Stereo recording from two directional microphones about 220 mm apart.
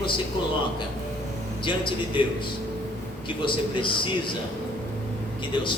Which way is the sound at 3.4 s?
20° left (ahead or behind).